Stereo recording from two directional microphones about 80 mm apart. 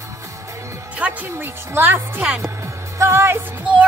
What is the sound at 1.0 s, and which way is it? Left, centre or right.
A woman's voice, right.